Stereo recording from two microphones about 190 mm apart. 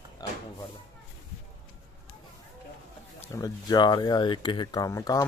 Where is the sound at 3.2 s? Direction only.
20° left (ahead or behind).